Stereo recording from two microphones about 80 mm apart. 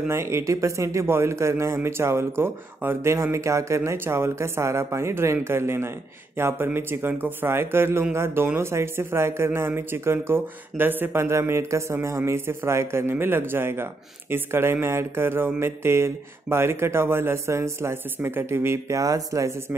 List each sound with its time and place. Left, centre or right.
0.1 s speech: right